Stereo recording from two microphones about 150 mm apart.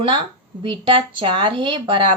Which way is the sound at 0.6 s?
35° right (ahead or behind).